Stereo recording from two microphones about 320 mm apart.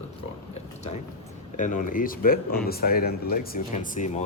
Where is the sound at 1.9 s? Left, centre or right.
Left.